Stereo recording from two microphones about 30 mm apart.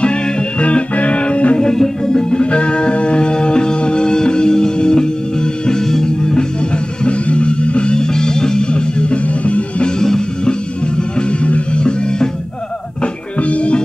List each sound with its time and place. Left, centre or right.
0.0 s music: left
1.8 s music: left
2.5 s music: left
7.1 s music: left
7.9 s music: left
9.8 s music: left
11.1 s music: left
13.4 s music: left